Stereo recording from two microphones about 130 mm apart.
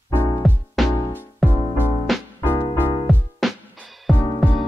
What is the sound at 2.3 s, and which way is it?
Music, 20° left (ahead or behind).